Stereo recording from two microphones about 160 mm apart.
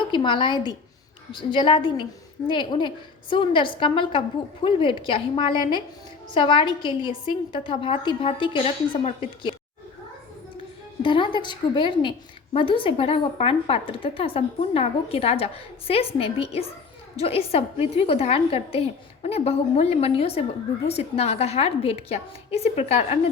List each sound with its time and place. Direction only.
0.1 s a woman's voice: 30° left (ahead or behind)
11.0 s a woman's voice: 30° left (ahead or behind)